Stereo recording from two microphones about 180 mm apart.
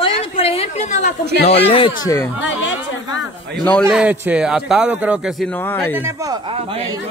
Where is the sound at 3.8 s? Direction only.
10° right (ahead or behind).